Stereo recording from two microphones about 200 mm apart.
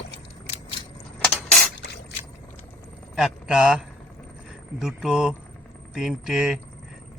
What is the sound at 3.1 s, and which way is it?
Speech, 5° right (ahead or behind).